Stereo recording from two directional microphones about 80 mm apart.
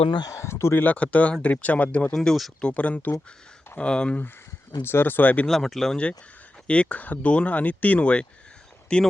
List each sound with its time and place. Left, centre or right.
0.3 s speech: left
0.9 s speech: centre
2.1 s speech: centre
2.6 s speech: centre
4.8 s speech: left
5.5 s speech: centre
6.7 s speech: centre